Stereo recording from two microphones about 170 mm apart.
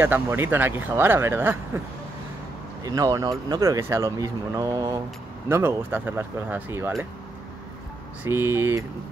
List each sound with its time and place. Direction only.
0.0 s speech: 15° right (ahead or behind)
2.8 s speech: 20° right (ahead or behind)
8.2 s speech: 15° right (ahead or behind)